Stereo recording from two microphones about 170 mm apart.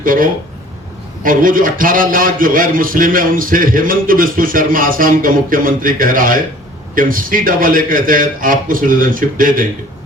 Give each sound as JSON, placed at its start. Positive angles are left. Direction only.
{"t": 0.0, "sound": "a man's voice", "side_deg": -55}